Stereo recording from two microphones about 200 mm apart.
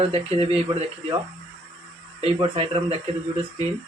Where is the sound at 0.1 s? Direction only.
30° right (ahead or behind).